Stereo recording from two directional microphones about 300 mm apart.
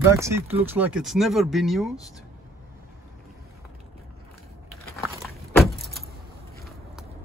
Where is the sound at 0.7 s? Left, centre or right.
Centre.